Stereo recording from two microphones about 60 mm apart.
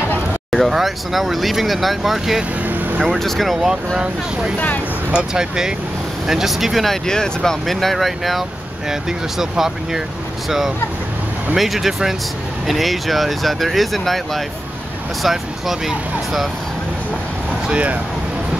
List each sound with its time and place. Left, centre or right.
0.7 s speech: centre
11.5 s speech: centre
17.6 s speech: centre